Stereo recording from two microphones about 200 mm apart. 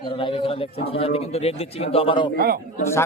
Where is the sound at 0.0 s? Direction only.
25° left (ahead or behind).